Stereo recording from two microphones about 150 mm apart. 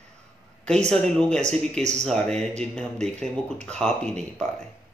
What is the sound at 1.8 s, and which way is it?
Speech, 50° right (ahead or behind).